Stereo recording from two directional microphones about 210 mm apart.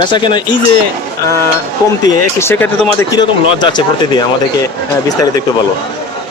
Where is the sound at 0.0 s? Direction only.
20° left (ahead or behind).